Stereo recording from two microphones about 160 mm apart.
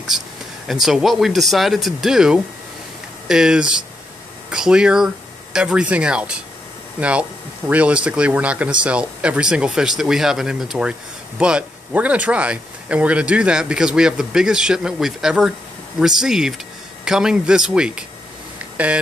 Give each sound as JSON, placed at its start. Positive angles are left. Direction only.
{"t": 0.1, "sound": "speech", "side_deg": -5}